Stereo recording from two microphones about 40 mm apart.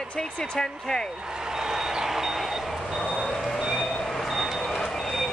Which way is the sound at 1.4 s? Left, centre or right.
Centre.